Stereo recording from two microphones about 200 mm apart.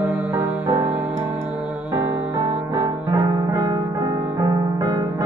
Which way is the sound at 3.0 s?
15° right (ahead or behind).